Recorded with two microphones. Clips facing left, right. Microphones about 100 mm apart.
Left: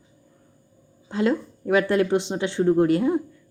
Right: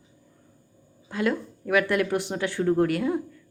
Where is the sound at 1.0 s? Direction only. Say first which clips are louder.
Left 4 dB; 25° left (ahead or behind).